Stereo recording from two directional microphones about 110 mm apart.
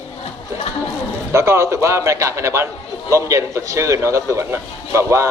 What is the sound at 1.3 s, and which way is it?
A man's voice, 25° right (ahead or behind).